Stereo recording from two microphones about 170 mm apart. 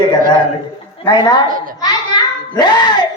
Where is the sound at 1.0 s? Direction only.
25° left (ahead or behind).